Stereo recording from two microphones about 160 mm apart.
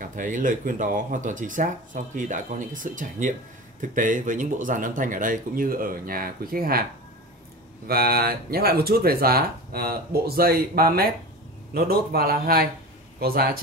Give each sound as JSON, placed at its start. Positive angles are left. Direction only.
{"t": 0.0, "sound": "speech", "side_deg": -55}
{"t": 7.8, "sound": "speech", "side_deg": -70}